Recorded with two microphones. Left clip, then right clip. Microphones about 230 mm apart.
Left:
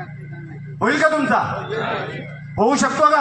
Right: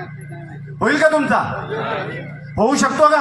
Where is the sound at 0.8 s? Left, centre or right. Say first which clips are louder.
Right 2 dB; right.